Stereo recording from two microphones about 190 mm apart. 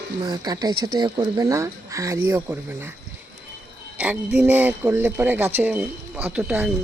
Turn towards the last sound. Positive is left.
turn(degrees=-5)  # may be behind; listen again after turning